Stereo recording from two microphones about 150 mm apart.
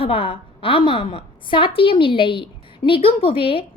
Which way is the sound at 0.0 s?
40° left (ahead or behind).